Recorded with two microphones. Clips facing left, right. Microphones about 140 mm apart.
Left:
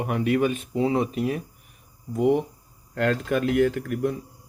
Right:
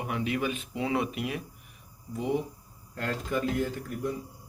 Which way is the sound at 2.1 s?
60° left (ahead or behind).